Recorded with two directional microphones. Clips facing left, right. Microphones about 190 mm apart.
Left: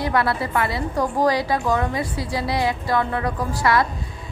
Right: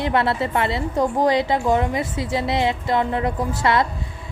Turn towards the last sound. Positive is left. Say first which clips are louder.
# even
turn(degrees=-25)  # may be behind; listen again after turning